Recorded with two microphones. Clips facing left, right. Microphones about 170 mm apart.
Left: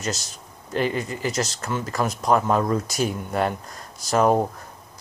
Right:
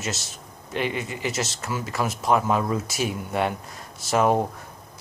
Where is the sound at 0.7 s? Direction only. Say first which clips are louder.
Left 3 dB; 40° left (ahead or behind).